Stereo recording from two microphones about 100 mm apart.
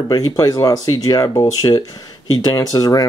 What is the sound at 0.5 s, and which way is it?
Speech, 35° left (ahead or behind).